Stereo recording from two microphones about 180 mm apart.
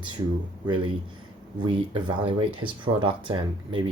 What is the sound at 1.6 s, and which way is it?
Speech, 25° right (ahead or behind).